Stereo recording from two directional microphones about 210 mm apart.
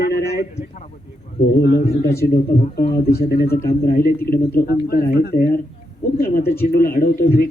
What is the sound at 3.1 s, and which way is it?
Speech, 50° left (ahead or behind).